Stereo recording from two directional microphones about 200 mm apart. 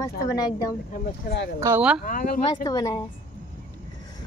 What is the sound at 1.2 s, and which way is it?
Speech, 60° left (ahead or behind).